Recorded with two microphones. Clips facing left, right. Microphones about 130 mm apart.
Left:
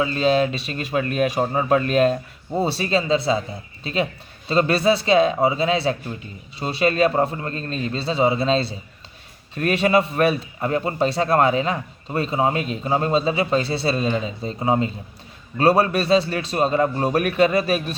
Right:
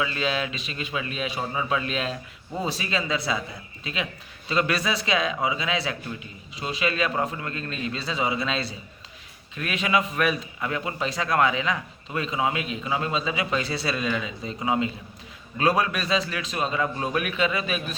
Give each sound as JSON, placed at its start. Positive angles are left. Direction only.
{"t": 0.0, "sound": "a man's voice", "side_deg": 35}
{"t": 2.6, "sound": "a man's voice", "side_deg": 35}